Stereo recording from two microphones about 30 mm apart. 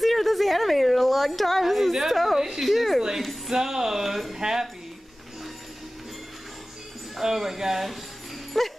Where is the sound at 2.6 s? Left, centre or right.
Centre.